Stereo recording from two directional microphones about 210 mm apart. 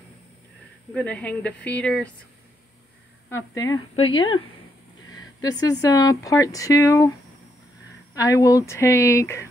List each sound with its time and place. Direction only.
0.9 s speech: 5° left (ahead or behind)
3.3 s speech: 15° left (ahead or behind)
5.4 s speech: 20° left (ahead or behind)
8.1 s speech: 15° left (ahead or behind)